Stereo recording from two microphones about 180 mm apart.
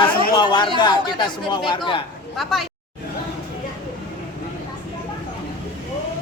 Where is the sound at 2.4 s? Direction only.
Centre (ahead or behind).